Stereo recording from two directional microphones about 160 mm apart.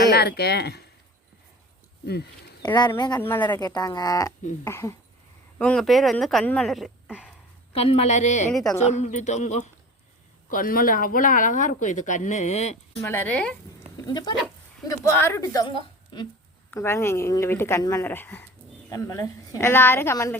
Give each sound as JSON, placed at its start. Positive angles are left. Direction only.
{"t": 0.1, "sound": "speech", "side_deg": 90}
{"t": 3.2, "sound": "speech", "side_deg": 10}
{"t": 3.6, "sound": "speech", "side_deg": 25}
{"t": 5.5, "sound": "speech", "side_deg": 5}
{"t": 7.7, "sound": "speech", "side_deg": 35}
{"t": 10.5, "sound": "speech", "side_deg": 60}
{"t": 13.0, "sound": "speech", "side_deg": 15}
{"t": 14.1, "sound": "speech", "side_deg": 25}
{"t": 14.8, "sound": "speech", "side_deg": 15}
{"t": 16.7, "sound": "speech", "side_deg": 15}